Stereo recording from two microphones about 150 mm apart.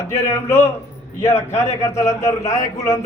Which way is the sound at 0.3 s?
15° left (ahead or behind).